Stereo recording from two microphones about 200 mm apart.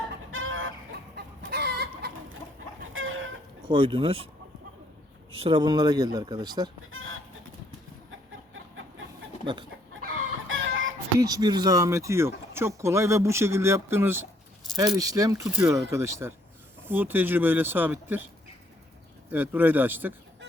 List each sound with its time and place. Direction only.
0.3 s chicken: 90° right
1.1 s chicken: 55° right (ahead or behind)
2.9 s chicken: 85° right
3.7 s speech: 25° right (ahead or behind)
5.3 s speech: 25° right (ahead or behind)
6.9 s chicken: 85° right
10.5 s music: 80° right
11.2 s speech: 20° right (ahead or behind)
19.3 s speech: 10° right (ahead or behind)